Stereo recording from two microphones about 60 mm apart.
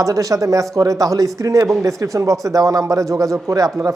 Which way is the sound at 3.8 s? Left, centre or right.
Right.